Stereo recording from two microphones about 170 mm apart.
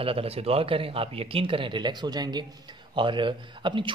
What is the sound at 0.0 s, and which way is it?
A woman's voice, 35° right (ahead or behind).